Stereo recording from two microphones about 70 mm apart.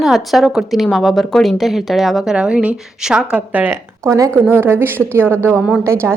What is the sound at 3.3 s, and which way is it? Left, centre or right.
Speech, right.